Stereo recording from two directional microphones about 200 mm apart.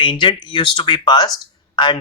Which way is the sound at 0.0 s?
25° left (ahead or behind).